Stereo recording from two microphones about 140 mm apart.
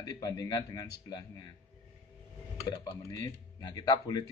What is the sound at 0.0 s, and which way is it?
Speech, 25° left (ahead or behind).